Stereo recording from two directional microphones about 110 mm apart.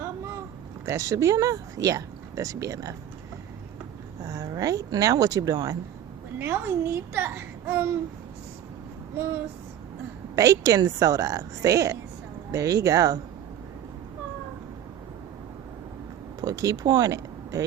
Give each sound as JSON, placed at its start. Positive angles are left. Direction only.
{"t": 0.9, "sound": "speech", "side_deg": -30}
{"t": 4.2, "sound": "speech", "side_deg": -30}
{"t": 6.4, "sound": "a child's voice", "side_deg": -20}
{"t": 10.3, "sound": "speech", "side_deg": -30}
{"t": 16.4, "sound": "speech", "side_deg": -30}